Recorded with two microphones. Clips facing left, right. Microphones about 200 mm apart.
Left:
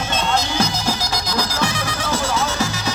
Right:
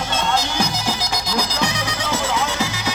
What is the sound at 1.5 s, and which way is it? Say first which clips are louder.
Music: left 1 dB; 15° right (ahead or behind).